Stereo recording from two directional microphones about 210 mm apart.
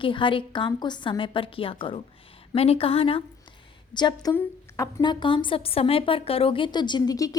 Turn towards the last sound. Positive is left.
turn(degrees=15)  # may be behind; listen again after turning